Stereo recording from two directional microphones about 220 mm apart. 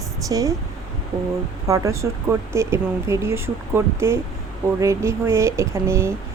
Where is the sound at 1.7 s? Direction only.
15° right (ahead or behind).